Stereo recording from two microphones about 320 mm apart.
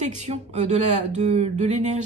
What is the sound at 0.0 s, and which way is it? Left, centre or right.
Speech, right.